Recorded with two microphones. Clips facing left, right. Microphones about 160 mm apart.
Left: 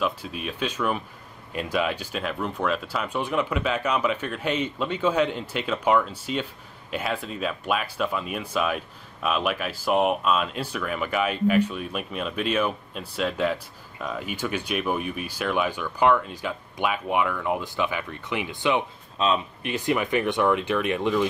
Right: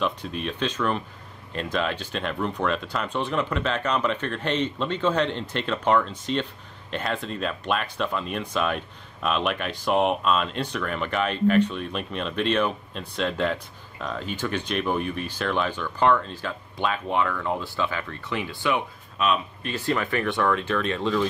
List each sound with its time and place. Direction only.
0.0 s speech: 5° left (ahead or behind); by 19.4 s 30° left (ahead or behind)
19.6 s speech: 15° left (ahead or behind)